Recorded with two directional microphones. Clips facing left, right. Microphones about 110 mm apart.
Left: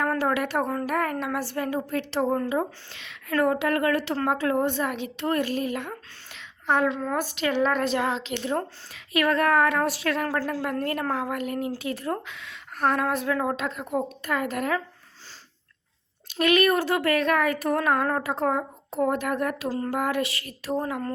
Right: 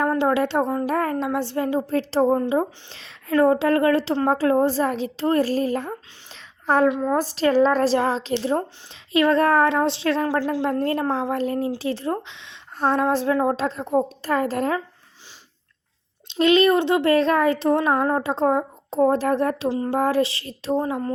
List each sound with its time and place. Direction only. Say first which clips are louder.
0.0 s a woman's voice: right 5 dB; 25° right (ahead or behind)
6.8 s a woman's voice: right 6 dB; 15° right (ahead or behind)
7.2 s a woman's voice: right 7 dB; 35° right (ahead or behind)
16.2 s a woman's voice: right 4 dB; 25° right (ahead or behind)
20.0 s a woman's voice: right 6 dB; 30° right (ahead or behind)